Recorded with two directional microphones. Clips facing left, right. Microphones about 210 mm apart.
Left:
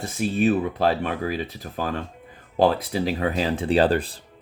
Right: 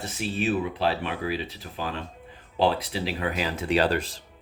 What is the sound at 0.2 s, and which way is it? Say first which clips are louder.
Speech: left 6 dB; 45° left (ahead or behind).